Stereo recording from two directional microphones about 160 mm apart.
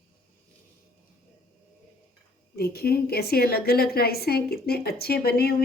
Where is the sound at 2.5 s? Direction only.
75° left (ahead or behind).